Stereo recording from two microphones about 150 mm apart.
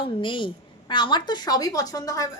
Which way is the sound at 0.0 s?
35° left (ahead or behind).